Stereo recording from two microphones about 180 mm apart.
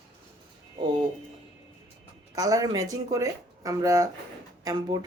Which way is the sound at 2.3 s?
20° right (ahead or behind).